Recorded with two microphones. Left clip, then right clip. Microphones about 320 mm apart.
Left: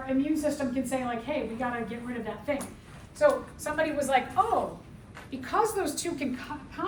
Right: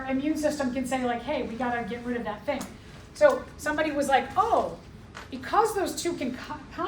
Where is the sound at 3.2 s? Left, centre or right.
Centre.